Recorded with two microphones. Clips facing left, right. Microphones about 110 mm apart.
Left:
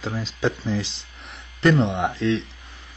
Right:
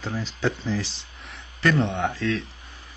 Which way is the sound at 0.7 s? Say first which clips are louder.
Left 2 dB; 15° left (ahead or behind).